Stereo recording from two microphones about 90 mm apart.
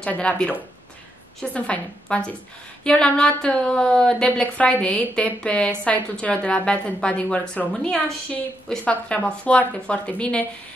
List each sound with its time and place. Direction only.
0.0 s a woman's voice: 15° left (ahead or behind)